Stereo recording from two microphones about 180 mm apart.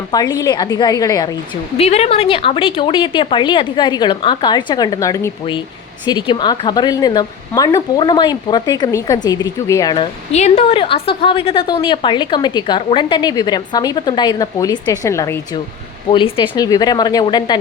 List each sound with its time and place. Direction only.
0.1 s a woman's voice: 20° left (ahead or behind)
1.8 s a woman's voice: 35° left (ahead or behind)
10.3 s a woman's voice: 40° left (ahead or behind)